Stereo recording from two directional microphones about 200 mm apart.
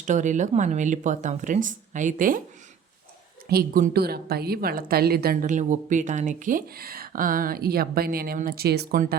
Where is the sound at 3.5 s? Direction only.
45° right (ahead or behind).